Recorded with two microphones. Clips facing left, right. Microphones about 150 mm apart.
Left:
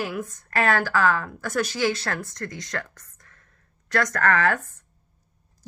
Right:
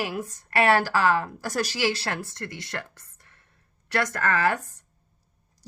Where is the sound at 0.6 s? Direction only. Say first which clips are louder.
Right 1 dB; 15° right (ahead or behind).